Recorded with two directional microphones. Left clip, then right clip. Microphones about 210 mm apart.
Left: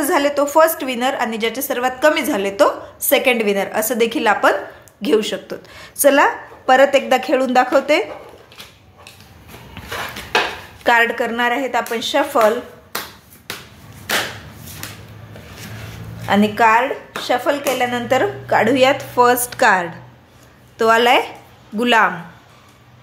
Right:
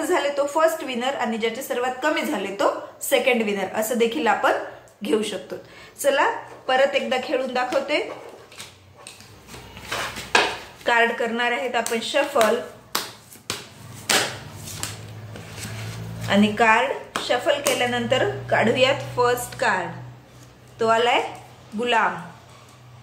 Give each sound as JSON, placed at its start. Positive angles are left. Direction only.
{"t": 0.0, "sound": "a woman's voice", "side_deg": 50}
{"t": 10.8, "sound": "a woman's voice", "side_deg": 45}
{"t": 16.3, "sound": "a woman's voice", "side_deg": 35}